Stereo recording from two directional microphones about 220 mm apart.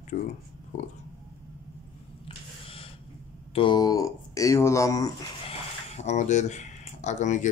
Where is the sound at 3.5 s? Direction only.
20° left (ahead or behind).